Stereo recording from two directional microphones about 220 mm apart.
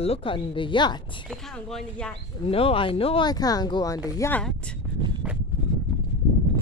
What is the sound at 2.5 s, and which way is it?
Speech, 25° left (ahead or behind).